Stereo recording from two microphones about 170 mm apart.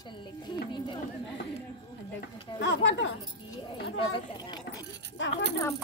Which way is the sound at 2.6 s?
90° left.